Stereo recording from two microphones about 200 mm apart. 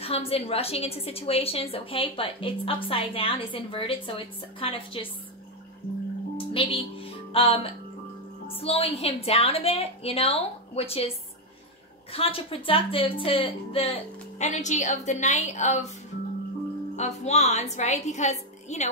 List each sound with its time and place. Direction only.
0.0 s a woman's voice: 30° left (ahead or behind)
6.3 s a woman's voice: 25° left (ahead or behind)
12.1 s a woman's voice: 30° left (ahead or behind)
16.9 s a woman's voice: 35° left (ahead or behind)